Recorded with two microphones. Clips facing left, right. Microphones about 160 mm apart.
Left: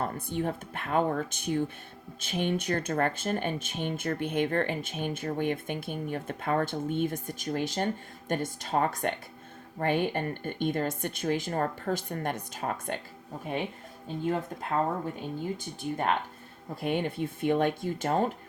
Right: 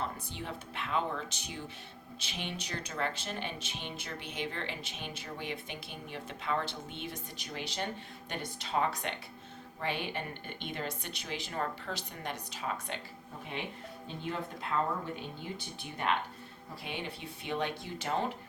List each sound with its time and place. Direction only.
0.0 s speech: 50° left (ahead or behind)
14.3 s speech: 45° left (ahead or behind)